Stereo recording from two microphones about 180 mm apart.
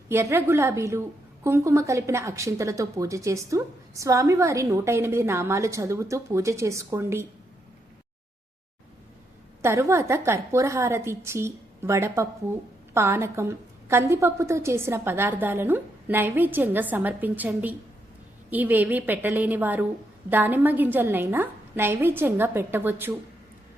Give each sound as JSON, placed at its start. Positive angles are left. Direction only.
{"t": 0.1, "sound": "a woman's voice", "side_deg": -15}
{"t": 9.6, "sound": "a woman's voice", "side_deg": -15}